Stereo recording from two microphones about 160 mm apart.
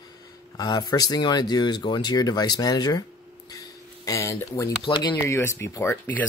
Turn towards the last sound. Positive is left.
turn(degrees=15)  # may be behind; listen again after turning